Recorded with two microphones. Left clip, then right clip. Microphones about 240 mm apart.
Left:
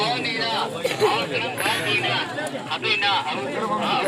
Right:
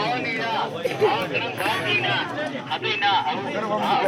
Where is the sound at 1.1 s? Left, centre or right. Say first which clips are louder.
Left 1 dB; left.